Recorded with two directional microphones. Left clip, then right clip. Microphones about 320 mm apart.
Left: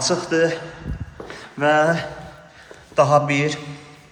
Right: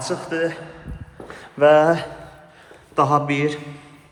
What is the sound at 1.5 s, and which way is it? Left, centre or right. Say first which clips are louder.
Speech: right 3 dB; centre.